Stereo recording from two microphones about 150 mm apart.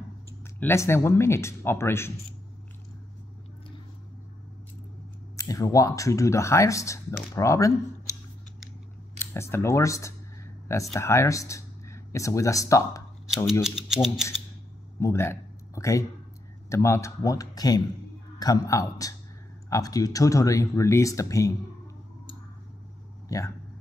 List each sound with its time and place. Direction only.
0.4 s speech: 15° left (ahead or behind)
5.3 s speech: 25° left (ahead or behind)
9.2 s speech: 15° left (ahead or behind)
13.5 s speech: 5° right (ahead or behind)
15.0 s speech: 20° left (ahead or behind)
23.2 s a sound: 20° left (ahead or behind)